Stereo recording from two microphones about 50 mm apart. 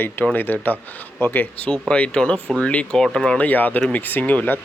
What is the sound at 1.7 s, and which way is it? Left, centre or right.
A man's voice, left.